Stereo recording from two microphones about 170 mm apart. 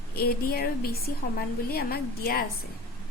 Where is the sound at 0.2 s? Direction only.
65° left (ahead or behind).